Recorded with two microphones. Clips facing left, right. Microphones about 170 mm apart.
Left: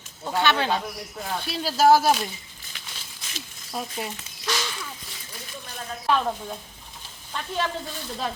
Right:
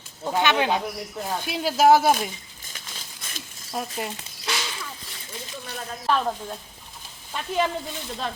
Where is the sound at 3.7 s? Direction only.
5° right (ahead or behind).